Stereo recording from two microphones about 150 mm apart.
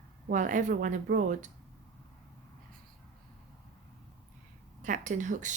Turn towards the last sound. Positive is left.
turn(degrees=-55)  # may be behind; listen again after turning